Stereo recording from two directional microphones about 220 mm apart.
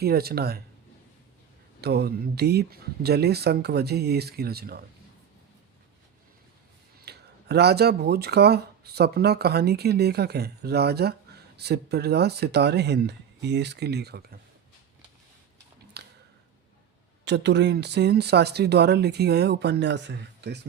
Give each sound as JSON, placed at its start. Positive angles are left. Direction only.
{"t": 0.0, "sound": "speech", "side_deg": -45}
{"t": 1.8, "sound": "speech", "side_deg": -45}
{"t": 7.0, "sound": "speech", "side_deg": -45}
{"t": 16.0, "sound": "a sound", "side_deg": -50}
{"t": 17.2, "sound": "speech", "side_deg": -50}